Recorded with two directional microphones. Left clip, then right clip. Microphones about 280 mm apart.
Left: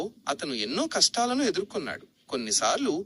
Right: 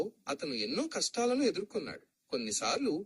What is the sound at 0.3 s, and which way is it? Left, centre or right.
A man's voice, centre.